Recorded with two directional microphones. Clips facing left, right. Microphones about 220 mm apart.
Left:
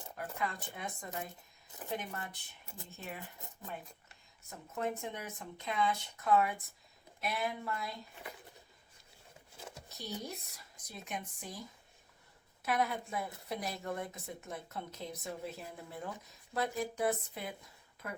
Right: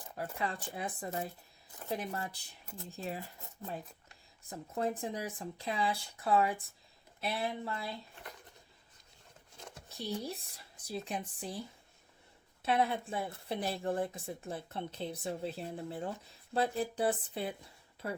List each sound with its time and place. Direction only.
0.3 s speech: 30° right (ahead or behind)
4.4 s speech: 35° right (ahead or behind)
9.6 s a sound: 5° left (ahead or behind)
9.9 s speech: 30° right (ahead or behind)
12.6 s a woman's voice: 30° right (ahead or behind)